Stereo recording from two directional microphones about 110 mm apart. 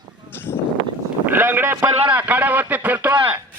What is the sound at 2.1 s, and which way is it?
Speech, 15° right (ahead or behind).